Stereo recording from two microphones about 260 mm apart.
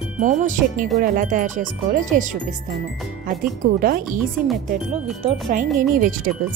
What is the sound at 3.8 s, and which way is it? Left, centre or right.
Speech, right.